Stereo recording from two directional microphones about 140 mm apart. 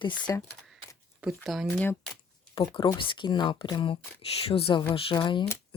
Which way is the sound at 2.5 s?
40° left (ahead or behind).